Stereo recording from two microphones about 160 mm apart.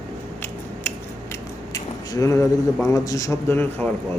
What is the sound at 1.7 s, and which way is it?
Speech, 20° left (ahead or behind).